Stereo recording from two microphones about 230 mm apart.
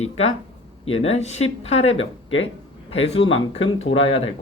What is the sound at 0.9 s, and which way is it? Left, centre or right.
A woman's voice, left.